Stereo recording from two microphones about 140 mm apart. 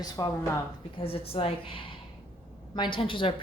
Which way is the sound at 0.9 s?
45° left (ahead or behind).